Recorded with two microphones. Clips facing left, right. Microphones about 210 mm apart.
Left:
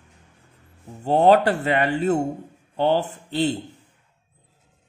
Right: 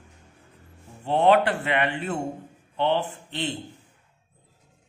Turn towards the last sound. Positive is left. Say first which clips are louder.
# left 8 dB
turn(degrees=40)  # may be behind; listen again after turning